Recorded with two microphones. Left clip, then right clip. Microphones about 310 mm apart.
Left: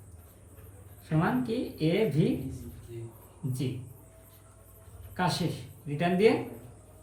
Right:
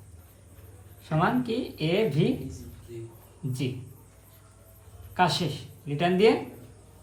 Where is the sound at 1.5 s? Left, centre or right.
Centre.